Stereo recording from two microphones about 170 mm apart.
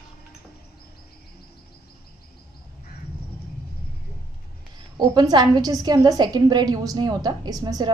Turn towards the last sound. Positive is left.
turn(degrees=-20)  # may be behind; listen again after turning